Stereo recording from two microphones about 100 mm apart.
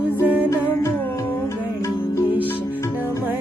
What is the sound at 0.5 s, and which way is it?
Music, 25° left (ahead or behind).